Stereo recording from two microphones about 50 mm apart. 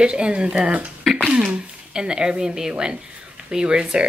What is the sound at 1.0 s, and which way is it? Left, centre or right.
Speech, centre.